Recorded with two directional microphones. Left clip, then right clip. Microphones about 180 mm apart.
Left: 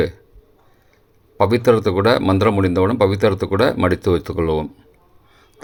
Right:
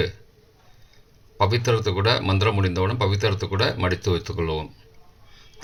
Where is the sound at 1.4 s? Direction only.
55° left (ahead or behind).